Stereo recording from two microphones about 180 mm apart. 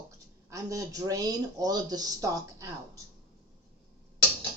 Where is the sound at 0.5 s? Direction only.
20° right (ahead or behind).